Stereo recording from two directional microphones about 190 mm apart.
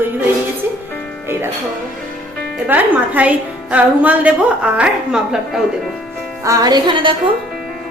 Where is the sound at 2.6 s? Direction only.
10° right (ahead or behind).